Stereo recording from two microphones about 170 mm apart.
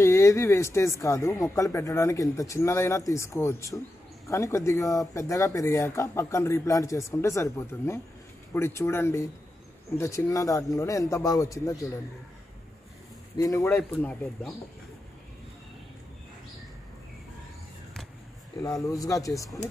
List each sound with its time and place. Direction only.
0.0 s speech: 15° left (ahead or behind)
13.4 s speech: 20° left (ahead or behind)
13.9 s speech: 5° left (ahead or behind)
18.6 s speech: 20° left (ahead or behind)